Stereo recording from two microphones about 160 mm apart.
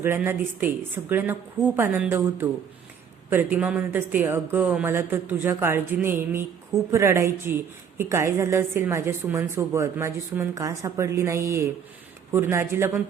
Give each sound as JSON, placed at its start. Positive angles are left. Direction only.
{"t": 0.0, "sound": "a woman's voice", "side_deg": -15}